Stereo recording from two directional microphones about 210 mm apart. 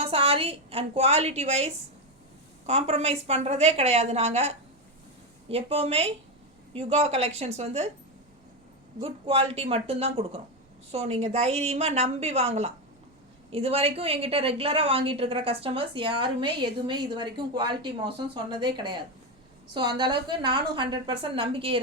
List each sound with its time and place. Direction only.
0.0 s a woman's voice: 25° right (ahead or behind)
9.0 s a woman's voice: 25° right (ahead or behind)